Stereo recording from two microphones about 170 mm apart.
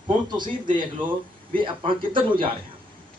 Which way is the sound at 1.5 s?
30° right (ahead or behind).